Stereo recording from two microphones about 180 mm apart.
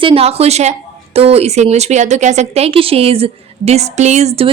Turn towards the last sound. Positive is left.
turn(degrees=-35)  # may be behind; listen again after turning